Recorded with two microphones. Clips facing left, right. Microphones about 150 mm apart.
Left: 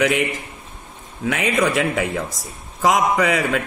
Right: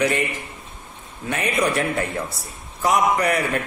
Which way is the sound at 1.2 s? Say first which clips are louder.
Left 3 dB; 90° left.